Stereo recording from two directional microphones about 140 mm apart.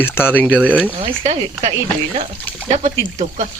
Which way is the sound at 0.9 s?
40° right (ahead or behind).